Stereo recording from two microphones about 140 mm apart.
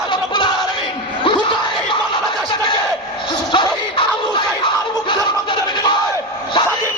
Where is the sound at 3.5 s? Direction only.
35° left (ahead or behind).